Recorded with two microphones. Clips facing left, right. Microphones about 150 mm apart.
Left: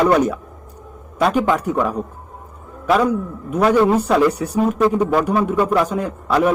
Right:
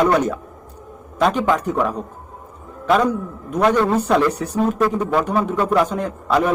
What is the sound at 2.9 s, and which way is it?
A man's voice, 10° left (ahead or behind).